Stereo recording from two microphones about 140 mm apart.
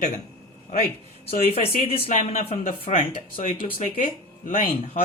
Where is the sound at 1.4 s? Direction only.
40° left (ahead or behind).